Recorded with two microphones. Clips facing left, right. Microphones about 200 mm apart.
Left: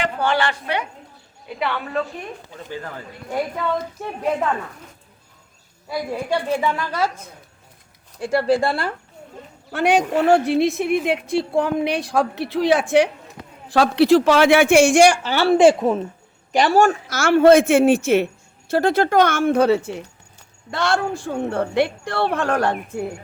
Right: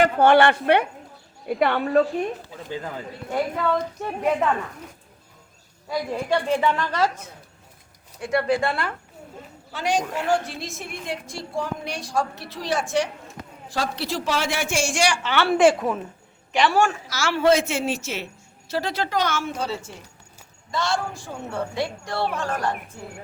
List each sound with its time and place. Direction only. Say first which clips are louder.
0.0 s a woman's voice: right 5 dB; 55° right (ahead or behind)
5.9 s a woman's voice: left 1 dB; 10° left (ahead or behind)
8.2 s speech: left 4 dB; 30° left (ahead or behind)
9.7 s a woman's voice: left 7 dB; 60° left (ahead or behind); by 15.4 s 40° left (ahead or behind)
15.4 s speech: left 5 dB; 25° left (ahead or behind)
16.5 s a man's voice: left 4 dB; 40° left (ahead or behind); by 22.7 s 65° left (ahead or behind)